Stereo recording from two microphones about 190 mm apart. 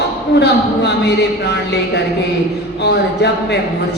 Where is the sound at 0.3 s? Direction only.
65° left (ahead or behind).